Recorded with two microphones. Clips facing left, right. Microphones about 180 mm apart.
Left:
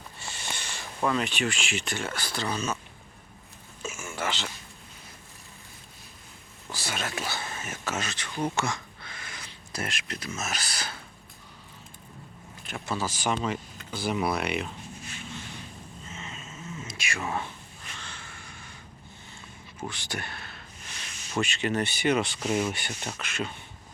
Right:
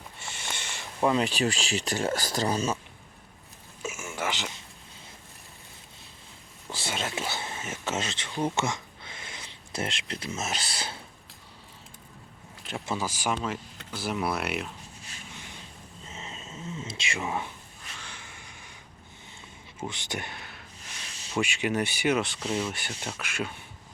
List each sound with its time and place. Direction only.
0.2 s a sound: 20° right (ahead or behind)
1.3 s speech: 35° right (ahead or behind)
3.8 s a sound: 20° right (ahead or behind)
6.7 s speech: 25° right (ahead or behind)
12.7 s speech: 25° right (ahead or behind)
13.0 s speech: 10° right (ahead or behind)
15.3 s vehicle: 15° right (ahead or behind)
16.0 s cat: 35° right (ahead or behind); by 17.5 s 10° right (ahead or behind)
17.9 s a sound: 10° right (ahead or behind)
19.9 s a man's voice: 20° right (ahead or behind); by 22.4 s centre (ahead or behind)
22.4 s speech: 30° right (ahead or behind)
23.1 s speech: 10° right (ahead or behind)